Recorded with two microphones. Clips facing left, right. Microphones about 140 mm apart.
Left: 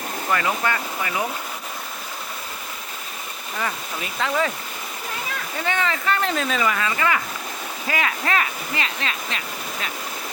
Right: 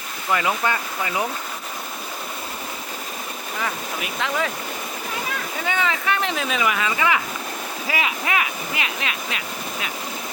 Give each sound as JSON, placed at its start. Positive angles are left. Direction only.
{"t": 0.3, "sound": "speech", "side_deg": -15}
{"t": 3.6, "sound": "speech", "side_deg": 0}
{"t": 5.6, "sound": "speech", "side_deg": -5}